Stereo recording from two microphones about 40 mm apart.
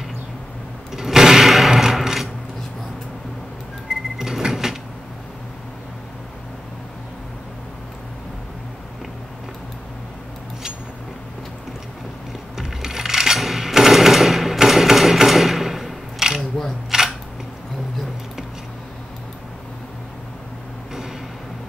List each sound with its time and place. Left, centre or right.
0.9 s a sound: centre
4.2 s sliding door: centre
12.5 s coin: centre
16.9 s camera: centre